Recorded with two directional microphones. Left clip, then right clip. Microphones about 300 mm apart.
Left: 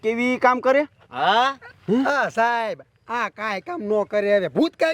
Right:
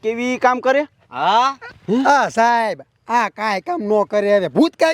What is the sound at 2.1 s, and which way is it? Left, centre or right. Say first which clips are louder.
Speech: right 8 dB; right.